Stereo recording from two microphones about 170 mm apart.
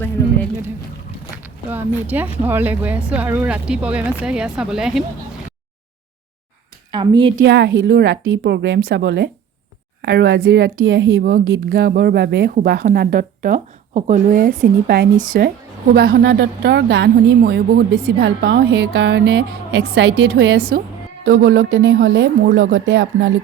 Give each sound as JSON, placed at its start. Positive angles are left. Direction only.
{"t": 1.7, "sound": "speech", "side_deg": -10}
{"t": 6.9, "sound": "a woman's voice", "side_deg": -25}
{"t": 7.4, "sound": "a woman's voice", "side_deg": -90}
{"t": 12.8, "sound": "a woman's voice", "side_deg": -60}
{"t": 16.0, "sound": "speech", "side_deg": -70}
{"t": 21.4, "sound": "speech", "side_deg": -90}